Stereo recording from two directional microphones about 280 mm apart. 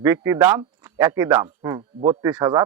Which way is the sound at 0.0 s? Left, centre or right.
Centre.